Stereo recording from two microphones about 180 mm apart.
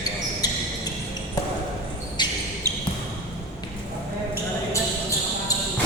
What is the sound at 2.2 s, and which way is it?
Basketball bounce, 25° left (ahead or behind).